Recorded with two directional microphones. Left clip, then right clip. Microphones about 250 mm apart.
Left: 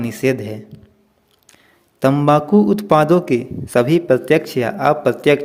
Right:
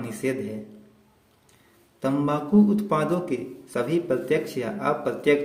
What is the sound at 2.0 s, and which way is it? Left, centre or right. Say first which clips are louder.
A man's voice: left 11 dB; left.